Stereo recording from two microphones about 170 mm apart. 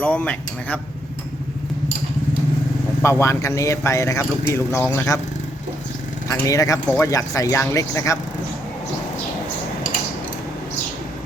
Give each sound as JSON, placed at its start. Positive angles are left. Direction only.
{"t": 0.0, "sound": "speech", "side_deg": 10}
{"t": 3.0, "sound": "speech", "side_deg": 15}
{"t": 6.2, "sound": "speech", "side_deg": 20}